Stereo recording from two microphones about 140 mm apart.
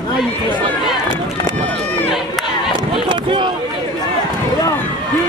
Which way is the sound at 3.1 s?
35° right (ahead or behind).